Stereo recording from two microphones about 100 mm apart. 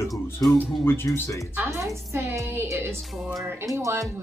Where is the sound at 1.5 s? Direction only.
25° right (ahead or behind).